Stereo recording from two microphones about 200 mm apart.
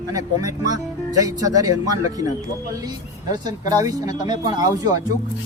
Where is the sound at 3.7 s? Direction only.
15° right (ahead or behind).